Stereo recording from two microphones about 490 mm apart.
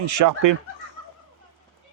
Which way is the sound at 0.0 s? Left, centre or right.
Right.